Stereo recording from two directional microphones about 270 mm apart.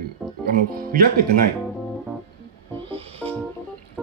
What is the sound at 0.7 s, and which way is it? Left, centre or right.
Speech, right.